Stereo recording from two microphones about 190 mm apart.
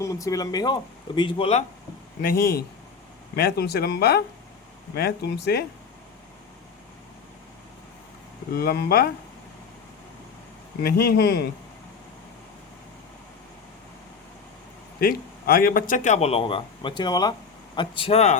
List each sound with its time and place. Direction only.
0.0 s speech: 15° left (ahead or behind)
2.2 s speech: 55° left (ahead or behind)
8.5 s speech: 55° left (ahead or behind)
10.8 s speech: 55° left (ahead or behind)
15.0 s speech: 50° left (ahead or behind); by 18.3 s 35° left (ahead or behind)